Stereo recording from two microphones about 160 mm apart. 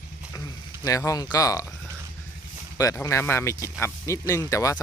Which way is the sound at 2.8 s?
20° left (ahead or behind).